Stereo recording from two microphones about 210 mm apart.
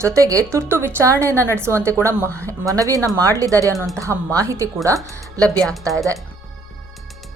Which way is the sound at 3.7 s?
Centre (ahead or behind).